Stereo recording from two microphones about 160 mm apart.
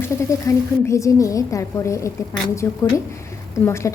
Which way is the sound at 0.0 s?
20° left (ahead or behind).